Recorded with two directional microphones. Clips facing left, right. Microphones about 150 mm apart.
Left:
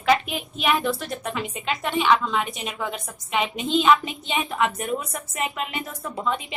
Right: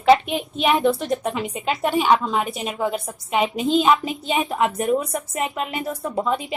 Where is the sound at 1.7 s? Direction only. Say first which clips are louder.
Right 3 dB; 40° right (ahead or behind).